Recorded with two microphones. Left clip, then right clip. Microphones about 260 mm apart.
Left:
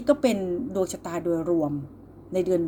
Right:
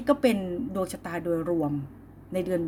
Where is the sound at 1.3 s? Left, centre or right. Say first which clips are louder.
Left 2 dB; right.